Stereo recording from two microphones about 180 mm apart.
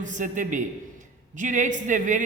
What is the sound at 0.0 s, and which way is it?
A man's voice, 45° right (ahead or behind).